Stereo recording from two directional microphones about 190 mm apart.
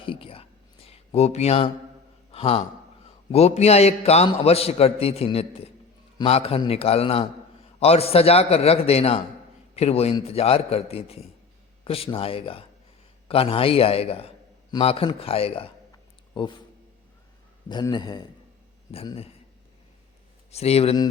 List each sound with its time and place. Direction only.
0.0 s whispering: 30° left (ahead or behind)
0.9 s a man's voice: 35° left (ahead or behind)
17.7 s a man's voice: 25° left (ahead or behind)
20.5 s a man's voice: 35° left (ahead or behind)